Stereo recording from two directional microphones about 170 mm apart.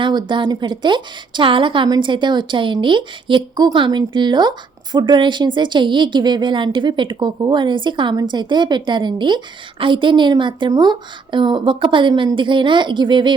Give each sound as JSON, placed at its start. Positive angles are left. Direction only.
{"t": 0.0, "sound": "a woman's voice", "side_deg": -25}